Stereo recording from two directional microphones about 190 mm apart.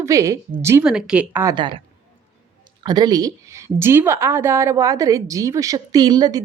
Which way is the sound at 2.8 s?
20° right (ahead or behind).